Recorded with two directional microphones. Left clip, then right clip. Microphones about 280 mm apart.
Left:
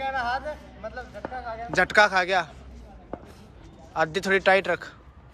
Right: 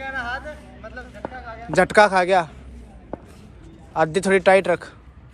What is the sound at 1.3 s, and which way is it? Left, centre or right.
Speech, left.